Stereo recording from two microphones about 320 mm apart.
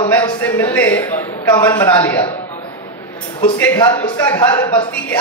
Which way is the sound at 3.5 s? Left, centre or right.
Centre.